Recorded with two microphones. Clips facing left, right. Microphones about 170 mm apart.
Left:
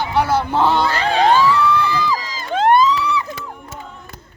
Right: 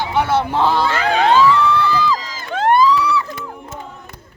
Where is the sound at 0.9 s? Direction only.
35° left (ahead or behind).